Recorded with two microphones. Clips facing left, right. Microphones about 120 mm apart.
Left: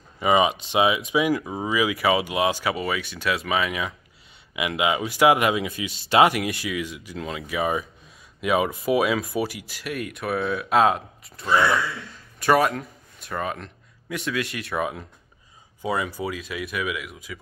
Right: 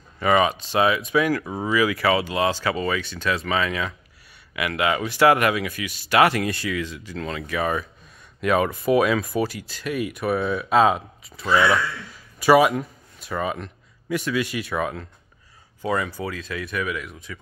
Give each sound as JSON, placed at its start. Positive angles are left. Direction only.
{"t": 0.2, "sound": "speech", "side_deg": 15}
{"t": 6.3, "sound": "a man's voice", "side_deg": 5}